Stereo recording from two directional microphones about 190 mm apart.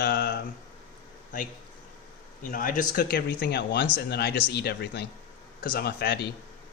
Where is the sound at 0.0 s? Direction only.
55° left (ahead or behind).